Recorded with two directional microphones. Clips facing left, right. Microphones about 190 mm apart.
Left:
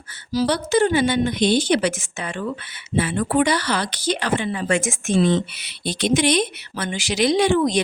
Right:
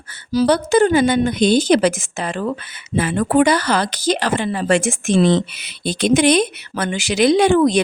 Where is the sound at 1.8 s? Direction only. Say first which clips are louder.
Right 5 dB; 90° right.